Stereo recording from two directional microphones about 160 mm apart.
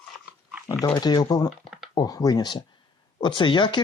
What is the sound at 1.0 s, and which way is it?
Speech, 25° left (ahead or behind).